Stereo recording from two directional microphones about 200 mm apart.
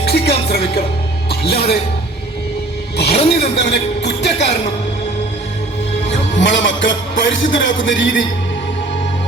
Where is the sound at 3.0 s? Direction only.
30° left (ahead or behind).